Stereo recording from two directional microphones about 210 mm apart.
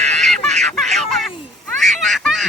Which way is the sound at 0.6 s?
Centre (ahead or behind).